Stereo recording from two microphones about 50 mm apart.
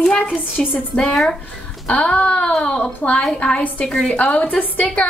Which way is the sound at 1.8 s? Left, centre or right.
Left.